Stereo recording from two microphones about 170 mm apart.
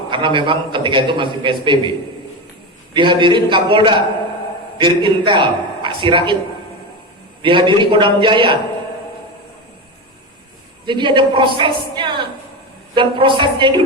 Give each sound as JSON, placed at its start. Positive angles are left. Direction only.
{"t": 0.1, "sound": "a man's voice", "side_deg": -30}
{"t": 2.9, "sound": "a man's voice", "side_deg": -30}
{"t": 7.4, "sound": "a man's voice", "side_deg": -30}
{"t": 10.8, "sound": "a man's voice", "side_deg": -30}